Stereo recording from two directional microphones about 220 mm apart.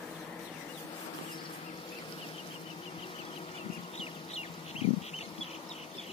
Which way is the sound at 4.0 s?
25° left (ahead or behind).